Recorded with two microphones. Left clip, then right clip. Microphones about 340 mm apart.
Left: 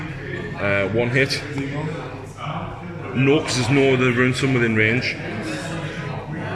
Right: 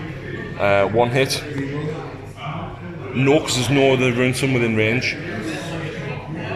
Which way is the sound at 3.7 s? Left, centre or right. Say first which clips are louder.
Right 1 dB; right.